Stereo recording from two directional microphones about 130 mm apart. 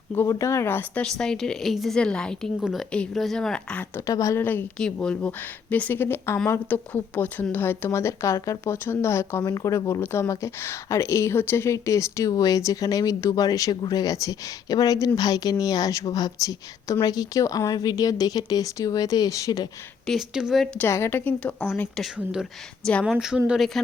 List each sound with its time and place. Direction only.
0.1 s speech: 20° left (ahead or behind)
1.0 s speech: 5° left (ahead or behind)
4.0 s speech: 25° left (ahead or behind)
4.8 s speech: 5° left (ahead or behind); by 19.6 s 30° left (ahead or behind)
20.1 s speech: 5° right (ahead or behind)
20.7 s speech: 20° left (ahead or behind); by 22.4 s 5° right (ahead or behind)
22.8 s speech: 10° left (ahead or behind)
23.0 s speech: 5° right (ahead or behind)